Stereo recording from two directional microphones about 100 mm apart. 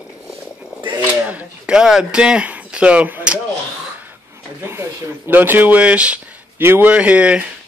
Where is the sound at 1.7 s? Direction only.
5° right (ahead or behind).